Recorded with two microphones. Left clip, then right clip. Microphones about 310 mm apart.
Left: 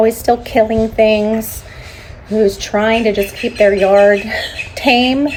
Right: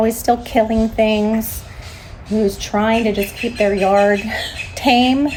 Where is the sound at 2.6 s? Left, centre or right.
Centre.